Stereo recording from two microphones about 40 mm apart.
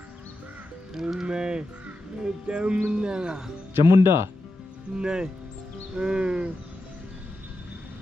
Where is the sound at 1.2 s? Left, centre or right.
Right.